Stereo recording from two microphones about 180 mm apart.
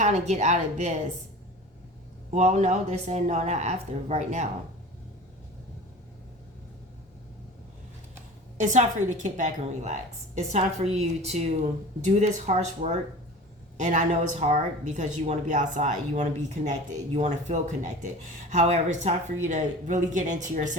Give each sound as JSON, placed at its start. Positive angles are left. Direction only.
{"t": 0.0, "sound": "a woman's voice", "side_deg": -40}
{"t": 2.3, "sound": "a woman's voice", "side_deg": -40}
{"t": 8.5, "sound": "a woman's voice", "side_deg": -45}